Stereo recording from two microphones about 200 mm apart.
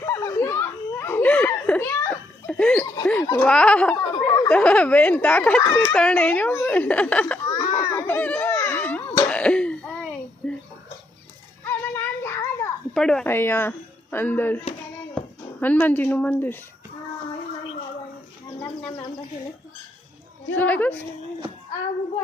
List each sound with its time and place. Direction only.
0.0 s a sound: 15° left (ahead or behind)
2.8 s a sound: 20° left (ahead or behind)
3.4 s speech: 5° left (ahead or behind)
7.4 s a sound: 20° left (ahead or behind)
9.3 s throat clearing: 5° left (ahead or behind)
11.6 s child singing: 10° left (ahead or behind)
12.9 s speech: 5° left (ahead or behind)
15.6 s speech: 10° left (ahead or behind)
20.6 s speech: 10° left (ahead or behind)